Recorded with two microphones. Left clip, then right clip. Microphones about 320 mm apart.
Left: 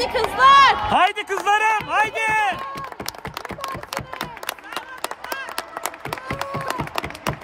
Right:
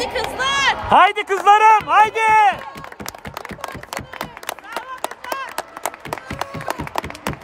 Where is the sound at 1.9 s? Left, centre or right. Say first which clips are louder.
Right 6 dB; right.